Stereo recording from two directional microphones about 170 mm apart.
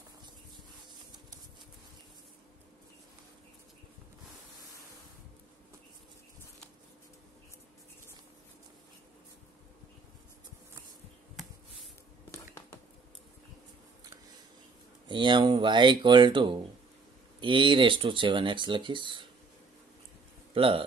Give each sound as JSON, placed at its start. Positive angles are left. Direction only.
{"t": 11.4, "sound": "a sound", "side_deg": 0}
{"t": 15.0, "sound": "speech", "side_deg": -25}
{"t": 20.5, "sound": "speech", "side_deg": -30}